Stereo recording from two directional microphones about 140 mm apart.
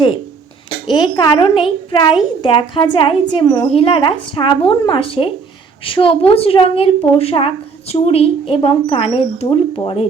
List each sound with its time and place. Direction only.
0.9 s a woman's voice: 30° left (ahead or behind)